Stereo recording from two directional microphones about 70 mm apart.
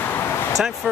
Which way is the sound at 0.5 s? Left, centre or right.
Centre.